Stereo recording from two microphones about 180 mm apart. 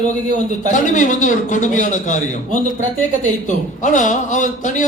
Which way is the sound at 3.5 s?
45° left (ahead or behind).